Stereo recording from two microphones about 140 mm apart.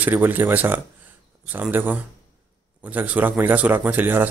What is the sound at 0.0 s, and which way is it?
Speech, 15° right (ahead or behind).